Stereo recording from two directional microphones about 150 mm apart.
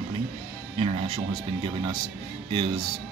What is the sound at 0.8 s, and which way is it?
Speech, 35° right (ahead or behind).